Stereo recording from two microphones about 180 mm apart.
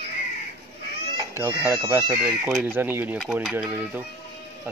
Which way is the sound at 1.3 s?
15° right (ahead or behind).